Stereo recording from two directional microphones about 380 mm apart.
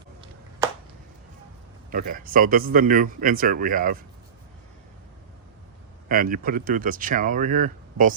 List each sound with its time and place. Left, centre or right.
1.9 s speech: right
6.1 s speech: right